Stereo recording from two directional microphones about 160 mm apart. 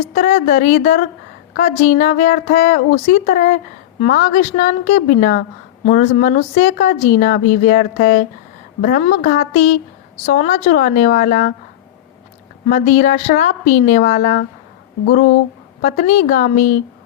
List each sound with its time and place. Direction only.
0.1 s a woman's voice: 55° left (ahead or behind)
12.6 s a woman's voice: 55° left (ahead or behind)
15.8 s speech: 55° left (ahead or behind)